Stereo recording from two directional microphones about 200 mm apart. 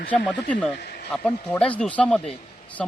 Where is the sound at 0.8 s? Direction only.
50° left (ahead or behind).